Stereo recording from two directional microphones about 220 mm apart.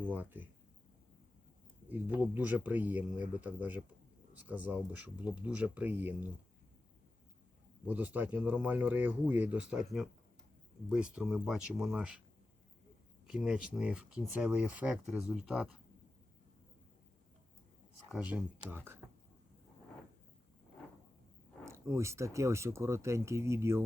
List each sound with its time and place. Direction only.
0.0 s speech: 10° right (ahead or behind)
1.9 s speech: 10° right (ahead or behind)
7.9 s speech: 5° right (ahead or behind)
13.2 s speech: 5° right (ahead or behind)
18.1 s speech: 5° right (ahead or behind)
21.6 s speech: 15° right (ahead or behind)